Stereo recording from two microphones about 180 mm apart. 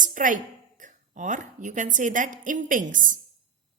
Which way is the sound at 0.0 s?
45° right (ahead or behind).